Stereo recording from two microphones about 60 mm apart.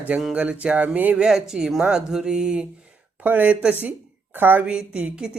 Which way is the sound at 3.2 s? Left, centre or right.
Right.